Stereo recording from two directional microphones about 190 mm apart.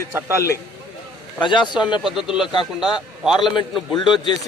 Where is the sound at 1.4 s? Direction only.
25° left (ahead or behind).